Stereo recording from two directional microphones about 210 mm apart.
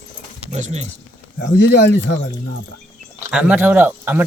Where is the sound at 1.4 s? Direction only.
55° left (ahead or behind).